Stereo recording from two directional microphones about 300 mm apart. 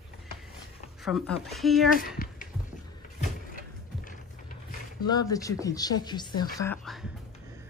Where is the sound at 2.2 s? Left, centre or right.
Left.